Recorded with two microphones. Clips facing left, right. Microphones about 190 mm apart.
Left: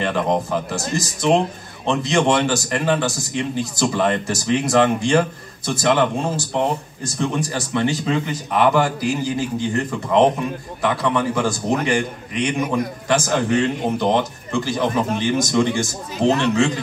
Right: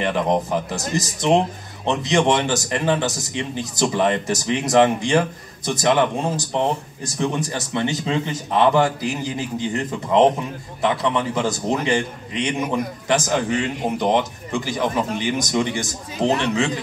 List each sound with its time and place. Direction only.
0.0 s a man's voice: 15° right (ahead or behind)